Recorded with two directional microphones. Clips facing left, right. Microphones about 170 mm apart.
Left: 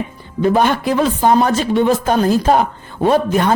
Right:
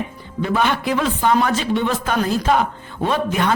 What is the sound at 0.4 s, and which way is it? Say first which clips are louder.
A man's voice: left 5 dB; 45° left (ahead or behind).